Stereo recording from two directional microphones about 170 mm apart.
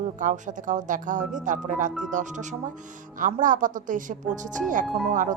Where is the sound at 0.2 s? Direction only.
50° right (ahead or behind).